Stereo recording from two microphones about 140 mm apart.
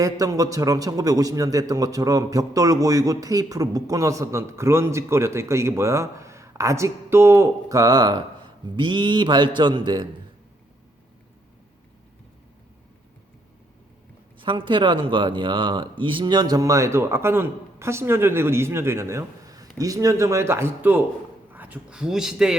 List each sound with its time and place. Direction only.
0.0 s a man's voice: 25° right (ahead or behind)
14.3 s a man's voice: 35° right (ahead or behind); by 22.5 s 5° right (ahead or behind)